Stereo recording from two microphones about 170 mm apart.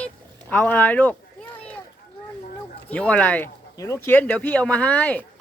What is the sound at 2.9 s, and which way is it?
Speech, 10° left (ahead or behind).